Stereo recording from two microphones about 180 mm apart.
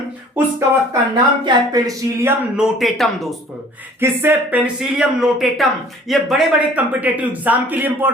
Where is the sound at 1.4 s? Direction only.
20° right (ahead or behind).